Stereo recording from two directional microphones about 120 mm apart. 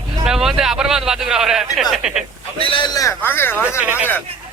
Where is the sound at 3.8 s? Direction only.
15° right (ahead or behind).